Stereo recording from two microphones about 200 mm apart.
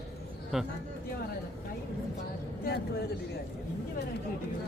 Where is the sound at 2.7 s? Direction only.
50° left (ahead or behind).